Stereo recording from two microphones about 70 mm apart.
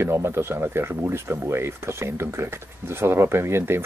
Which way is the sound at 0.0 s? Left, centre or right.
Right.